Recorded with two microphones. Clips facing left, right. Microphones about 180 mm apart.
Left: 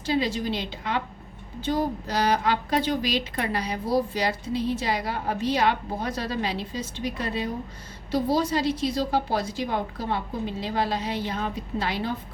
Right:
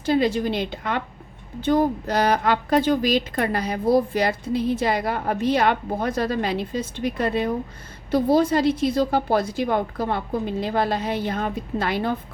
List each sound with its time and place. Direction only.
0.0 s a woman's voice: 55° right (ahead or behind)